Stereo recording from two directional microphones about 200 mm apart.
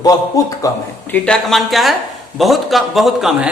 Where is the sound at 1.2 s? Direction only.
Centre (ahead or behind).